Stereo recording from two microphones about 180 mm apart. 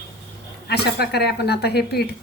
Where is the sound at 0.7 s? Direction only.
65° left (ahead or behind).